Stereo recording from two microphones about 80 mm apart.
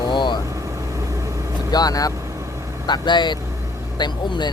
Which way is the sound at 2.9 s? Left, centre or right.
Left.